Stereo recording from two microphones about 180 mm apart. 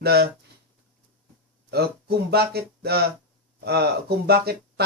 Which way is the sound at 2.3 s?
65° right (ahead or behind).